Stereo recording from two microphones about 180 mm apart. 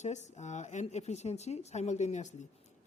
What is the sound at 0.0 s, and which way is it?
Speech, 40° left (ahead or behind).